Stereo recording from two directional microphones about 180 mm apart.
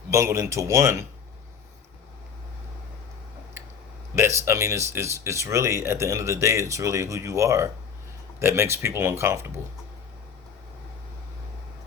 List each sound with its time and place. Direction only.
0.1 s speech: 15° right (ahead or behind)
4.4 s speech: 15° right (ahead or behind)